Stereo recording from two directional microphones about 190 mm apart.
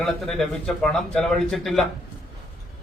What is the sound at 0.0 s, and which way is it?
A man's voice, 5° left (ahead or behind).